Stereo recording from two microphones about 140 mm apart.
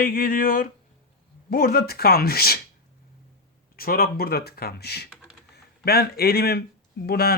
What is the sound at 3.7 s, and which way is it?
Speech, 90° left.